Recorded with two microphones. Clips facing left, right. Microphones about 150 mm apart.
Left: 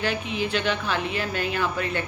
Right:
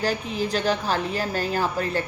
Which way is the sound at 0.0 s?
40° right (ahead or behind).